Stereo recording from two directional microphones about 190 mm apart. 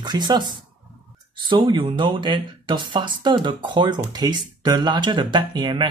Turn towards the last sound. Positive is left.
turn(degrees=-25)  # may be behind; listen again after turning